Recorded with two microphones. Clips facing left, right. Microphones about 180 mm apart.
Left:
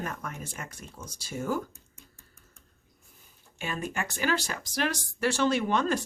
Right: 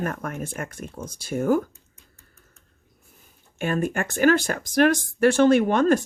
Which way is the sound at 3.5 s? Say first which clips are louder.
Right 9 dB; 50° right (ahead or behind).